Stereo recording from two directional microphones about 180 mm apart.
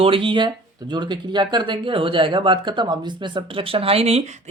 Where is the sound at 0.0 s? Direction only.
30° right (ahead or behind).